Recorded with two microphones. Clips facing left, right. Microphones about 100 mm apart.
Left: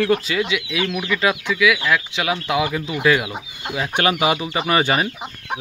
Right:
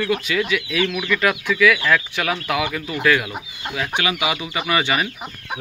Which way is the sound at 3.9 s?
40° left (ahead or behind).